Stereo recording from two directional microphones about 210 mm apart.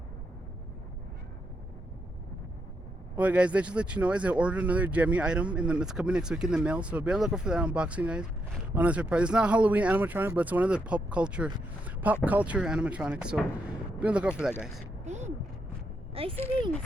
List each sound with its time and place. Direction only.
3.2 s speech: 5° right (ahead or behind)
11.9 s vehicle: 10° right (ahead or behind)
12.2 s speech: 5° right (ahead or behind)
15.0 s a sound: 35° right (ahead or behind)
16.1 s speech: 25° right (ahead or behind)